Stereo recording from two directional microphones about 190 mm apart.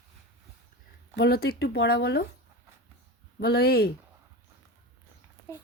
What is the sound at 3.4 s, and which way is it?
Speech, 55° left (ahead or behind).